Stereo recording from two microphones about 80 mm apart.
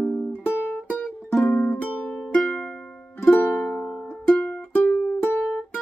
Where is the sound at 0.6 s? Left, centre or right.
Left.